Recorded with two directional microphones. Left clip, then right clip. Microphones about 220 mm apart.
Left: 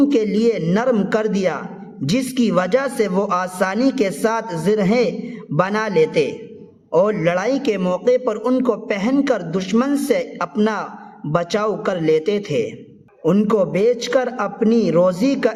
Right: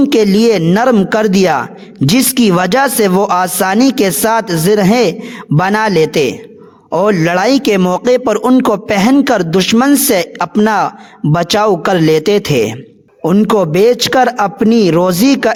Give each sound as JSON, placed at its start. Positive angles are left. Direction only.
{"t": 0.1, "sound": "speech", "side_deg": -50}